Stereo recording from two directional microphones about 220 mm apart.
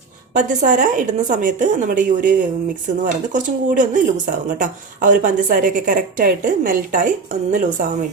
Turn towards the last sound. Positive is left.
turn(degrees=-35)  # may be behind; listen again after turning